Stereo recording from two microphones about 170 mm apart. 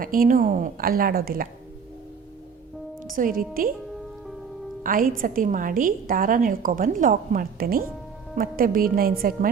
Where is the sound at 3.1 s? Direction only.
55° right (ahead or behind).